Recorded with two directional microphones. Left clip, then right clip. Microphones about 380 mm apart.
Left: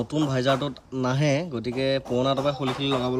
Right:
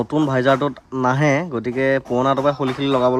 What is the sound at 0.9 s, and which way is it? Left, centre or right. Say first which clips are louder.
Speech: right 7 dB; centre.